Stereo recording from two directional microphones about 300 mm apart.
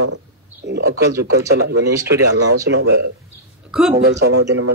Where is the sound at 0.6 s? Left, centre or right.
Right.